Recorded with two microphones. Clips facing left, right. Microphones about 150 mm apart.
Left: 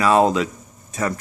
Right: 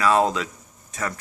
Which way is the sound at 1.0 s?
25° left (ahead or behind).